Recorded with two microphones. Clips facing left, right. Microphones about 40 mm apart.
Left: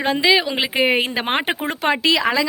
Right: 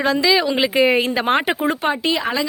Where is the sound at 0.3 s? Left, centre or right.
Centre.